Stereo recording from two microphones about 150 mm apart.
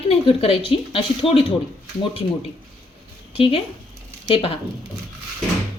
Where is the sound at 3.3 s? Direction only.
40° left (ahead or behind).